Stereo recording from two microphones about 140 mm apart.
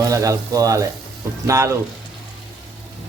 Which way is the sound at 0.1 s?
25° right (ahead or behind).